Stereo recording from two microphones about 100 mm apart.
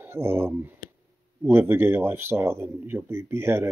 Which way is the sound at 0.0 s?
25° right (ahead or behind).